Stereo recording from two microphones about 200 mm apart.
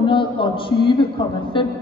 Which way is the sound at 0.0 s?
25° left (ahead or behind).